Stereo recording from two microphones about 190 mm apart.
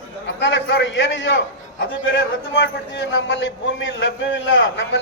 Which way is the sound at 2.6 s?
75° left (ahead or behind).